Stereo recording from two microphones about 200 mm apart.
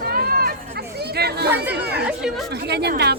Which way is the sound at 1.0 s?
55° right (ahead or behind).